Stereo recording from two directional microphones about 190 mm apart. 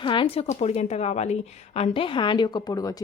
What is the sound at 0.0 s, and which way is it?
A woman's voice, 25° left (ahead or behind).